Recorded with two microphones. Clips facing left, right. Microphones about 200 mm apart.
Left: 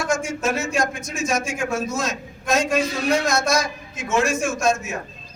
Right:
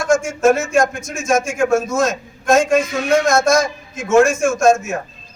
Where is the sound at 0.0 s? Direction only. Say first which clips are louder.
Right 8 dB; 50° right (ahead or behind).